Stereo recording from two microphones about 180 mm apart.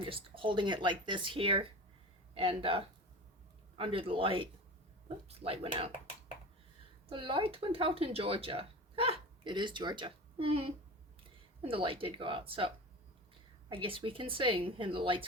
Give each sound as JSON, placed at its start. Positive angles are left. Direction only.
{"t": 0.0, "sound": "speech", "side_deg": -30}
{"t": 7.1, "sound": "speech", "side_deg": -30}